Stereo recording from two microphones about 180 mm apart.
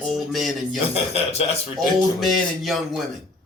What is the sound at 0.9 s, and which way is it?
Speech, 35° left (ahead or behind).